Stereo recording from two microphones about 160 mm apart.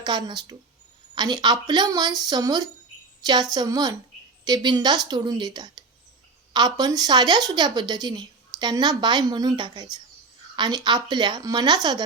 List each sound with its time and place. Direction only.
0.0 s a woman's voice: 25° right (ahead or behind)